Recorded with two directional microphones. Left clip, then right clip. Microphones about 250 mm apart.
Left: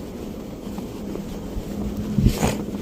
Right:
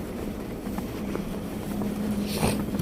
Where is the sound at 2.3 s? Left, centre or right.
Centre.